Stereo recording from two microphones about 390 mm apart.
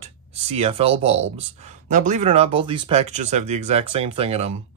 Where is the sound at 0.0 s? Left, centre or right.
Centre.